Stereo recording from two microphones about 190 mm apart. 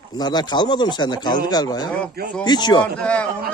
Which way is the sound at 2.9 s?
5° left (ahead or behind).